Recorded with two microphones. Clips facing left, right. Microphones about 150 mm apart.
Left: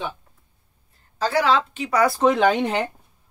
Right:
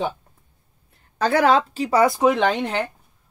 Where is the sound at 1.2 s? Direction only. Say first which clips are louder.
Right 3 dB; 55° right (ahead or behind); by 2.0 s 35° right (ahead or behind).